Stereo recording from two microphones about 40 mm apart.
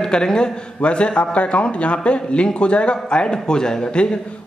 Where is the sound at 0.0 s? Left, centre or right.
Centre.